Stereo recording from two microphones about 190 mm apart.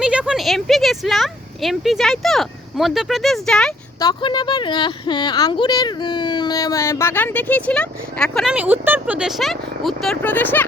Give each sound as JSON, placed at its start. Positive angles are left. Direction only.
{"t": 0.0, "sound": "speech", "side_deg": -5}
{"t": 4.0, "sound": "a woman's voice", "side_deg": 25}